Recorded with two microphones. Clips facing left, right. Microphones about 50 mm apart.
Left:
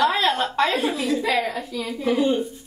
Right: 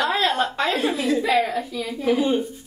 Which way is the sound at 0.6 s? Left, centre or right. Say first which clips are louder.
Left 1 dB; centre.